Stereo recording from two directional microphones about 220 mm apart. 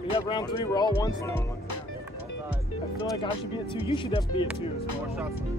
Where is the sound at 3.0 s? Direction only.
20° left (ahead or behind).